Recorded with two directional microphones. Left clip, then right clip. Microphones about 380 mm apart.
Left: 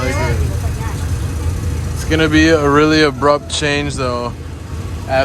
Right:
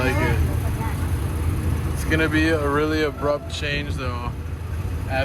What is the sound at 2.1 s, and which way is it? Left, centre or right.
Speech, centre.